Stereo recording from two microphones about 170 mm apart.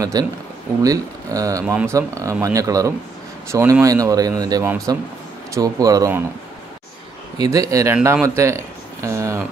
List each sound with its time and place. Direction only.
0.0 s speech: 20° right (ahead or behind)
7.3 s speech: 20° right (ahead or behind)